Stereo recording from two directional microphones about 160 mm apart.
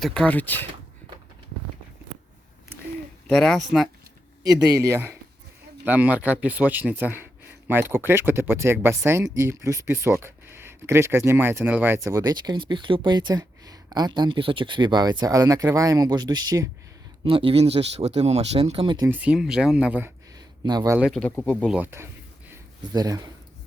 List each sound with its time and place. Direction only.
0.0 s speech: 5° left (ahead or behind)
3.2 s speech: 5° left (ahead or behind)
4.4 s speech: 25° right (ahead or behind)
12.0 s speech: 20° right (ahead or behind)
19.0 s speech: 10° right (ahead or behind)
20.7 s speech: 20° right (ahead or behind)
21.2 s speech: 10° left (ahead or behind)
21.7 s a sound: 10° right (ahead or behind)
22.9 s speech: 25° right (ahead or behind)